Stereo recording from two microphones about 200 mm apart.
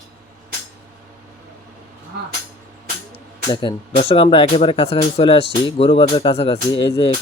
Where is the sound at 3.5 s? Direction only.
25° left (ahead or behind).